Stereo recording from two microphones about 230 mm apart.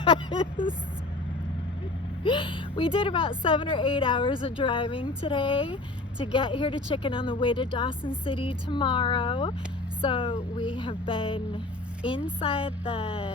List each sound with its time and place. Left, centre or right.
0.0 s a woman's voice: left
2.2 s a woman's voice: left